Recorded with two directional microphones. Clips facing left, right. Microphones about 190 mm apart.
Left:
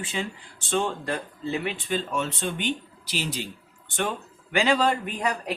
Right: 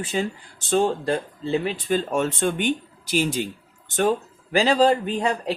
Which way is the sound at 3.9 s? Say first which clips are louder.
Right 8 dB; 35° right (ahead or behind).